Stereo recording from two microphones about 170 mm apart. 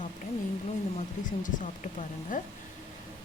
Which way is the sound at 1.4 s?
50° left (ahead or behind).